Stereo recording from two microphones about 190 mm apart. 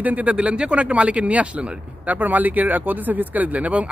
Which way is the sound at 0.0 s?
10° right (ahead or behind).